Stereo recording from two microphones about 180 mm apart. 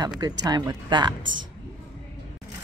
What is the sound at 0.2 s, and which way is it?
Speech, 20° right (ahead or behind).